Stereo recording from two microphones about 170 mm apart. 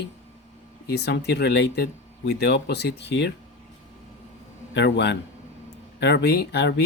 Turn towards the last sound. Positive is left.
turn(degrees=75)  # may be behind; listen again after turning